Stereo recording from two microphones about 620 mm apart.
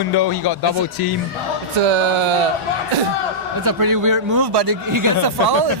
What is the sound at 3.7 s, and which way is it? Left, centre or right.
A man's voice, right.